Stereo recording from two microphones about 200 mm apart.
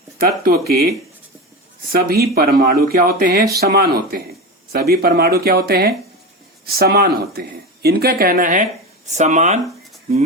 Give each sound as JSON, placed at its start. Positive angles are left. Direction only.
{"t": 0.7, "sound": "speech", "side_deg": -50}